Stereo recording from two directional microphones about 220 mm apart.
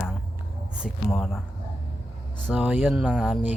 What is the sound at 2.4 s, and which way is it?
Speech, 5° right (ahead or behind).